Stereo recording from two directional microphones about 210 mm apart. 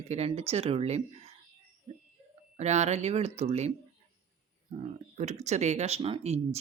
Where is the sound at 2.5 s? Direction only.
35° right (ahead or behind).